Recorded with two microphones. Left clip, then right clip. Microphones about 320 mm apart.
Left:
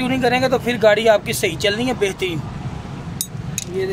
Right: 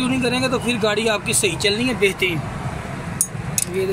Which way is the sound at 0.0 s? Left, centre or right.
Left.